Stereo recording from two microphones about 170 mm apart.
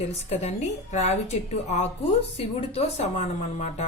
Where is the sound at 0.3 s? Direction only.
40° left (ahead or behind).